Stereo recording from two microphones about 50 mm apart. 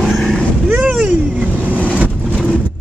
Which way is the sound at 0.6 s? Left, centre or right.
Right.